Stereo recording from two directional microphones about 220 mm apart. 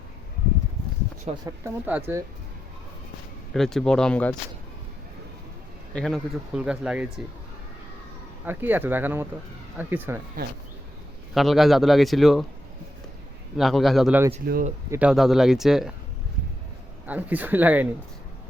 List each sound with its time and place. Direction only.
1.5 s speech: 10° right (ahead or behind)
3.5 s speech: centre (ahead or behind)
5.9 s speech: centre (ahead or behind)
8.4 s speech: 10° right (ahead or behind)
11.3 s speech: centre (ahead or behind)
13.6 s speech: centre (ahead or behind)
14.4 s speech: 40° right (ahead or behind)
14.8 s speech: 5° right (ahead or behind)
17.1 s speech: 5° right (ahead or behind)